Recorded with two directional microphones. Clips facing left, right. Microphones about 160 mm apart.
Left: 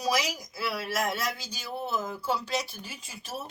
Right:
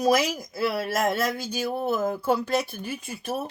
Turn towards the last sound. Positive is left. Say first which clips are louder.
# right 9 dB
turn(degrees=-55)  # may be behind; listen again after turning